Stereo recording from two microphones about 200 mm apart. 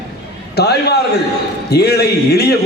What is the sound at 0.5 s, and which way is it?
A man's voice, 55° left (ahead or behind).